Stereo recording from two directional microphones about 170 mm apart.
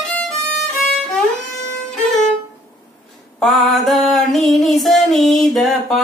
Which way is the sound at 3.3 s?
Centre (ahead or behind).